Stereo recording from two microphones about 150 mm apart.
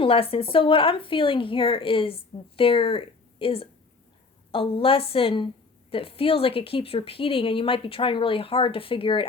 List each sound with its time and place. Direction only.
0.0 s speech: 40° left (ahead or behind)